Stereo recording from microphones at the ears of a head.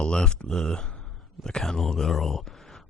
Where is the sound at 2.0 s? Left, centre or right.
Left.